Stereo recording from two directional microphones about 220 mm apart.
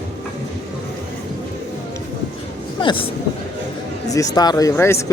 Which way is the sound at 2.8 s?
20° left (ahead or behind).